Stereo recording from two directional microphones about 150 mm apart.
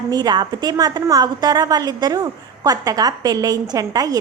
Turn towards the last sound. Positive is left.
turn(degrees=-25)  # may be behind; listen again after turning